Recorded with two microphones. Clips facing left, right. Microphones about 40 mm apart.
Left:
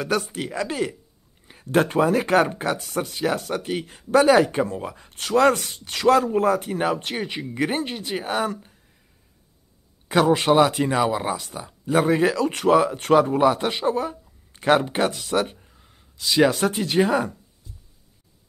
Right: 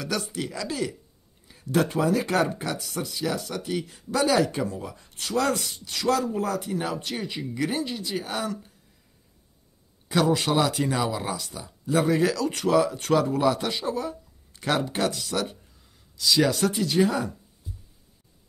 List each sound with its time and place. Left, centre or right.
0.0 s speech: left
10.0 s speech: left
17.6 s a sound: centre